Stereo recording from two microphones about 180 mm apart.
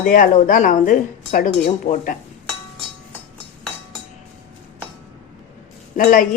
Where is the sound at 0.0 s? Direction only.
50° left (ahead or behind).